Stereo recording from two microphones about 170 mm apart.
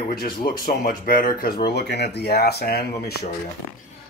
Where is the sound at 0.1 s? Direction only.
60° left (ahead or behind).